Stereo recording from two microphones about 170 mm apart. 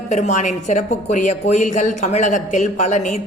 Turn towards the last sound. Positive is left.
turn(degrees=45)  # may be behind; listen again after turning